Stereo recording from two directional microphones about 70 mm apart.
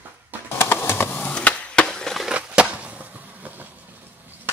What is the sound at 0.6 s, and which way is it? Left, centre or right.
Skateboard, left.